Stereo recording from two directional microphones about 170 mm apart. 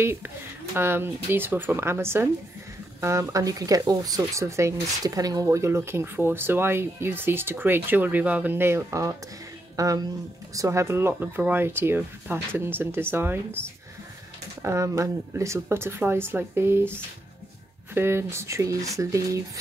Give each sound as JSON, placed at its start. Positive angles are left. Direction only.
{"t": 0.0, "sound": "speech", "side_deg": -15}
{"t": 14.6, "sound": "speech", "side_deg": -15}